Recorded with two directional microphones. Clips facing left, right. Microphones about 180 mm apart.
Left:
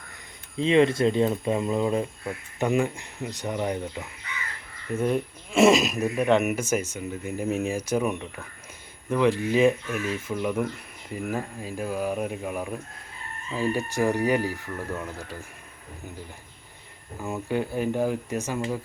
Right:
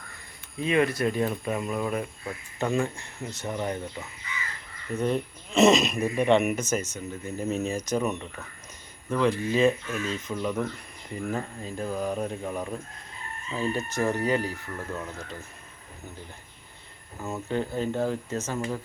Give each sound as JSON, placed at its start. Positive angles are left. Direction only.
{"t": 0.6, "sound": "speech", "side_deg": 25}
{"t": 17.5, "sound": "speech", "side_deg": 10}